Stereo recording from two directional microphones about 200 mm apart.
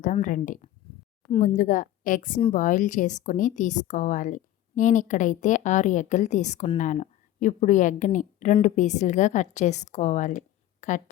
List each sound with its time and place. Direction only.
0.0 s a woman's voice: 40° left (ahead or behind)